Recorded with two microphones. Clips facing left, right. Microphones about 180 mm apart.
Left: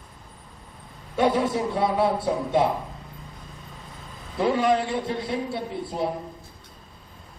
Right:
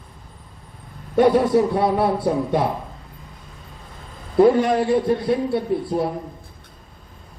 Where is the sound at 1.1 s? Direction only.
55° right (ahead or behind).